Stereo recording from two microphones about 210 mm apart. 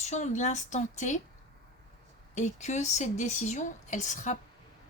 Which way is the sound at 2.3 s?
35° left (ahead or behind).